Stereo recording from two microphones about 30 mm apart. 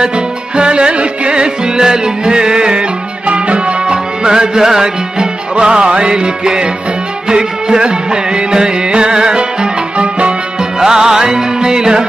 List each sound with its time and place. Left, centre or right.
0.0 s music: right
3.3 s music: right; by 5.3 s centre
5.6 s music: right
10.6 s music: right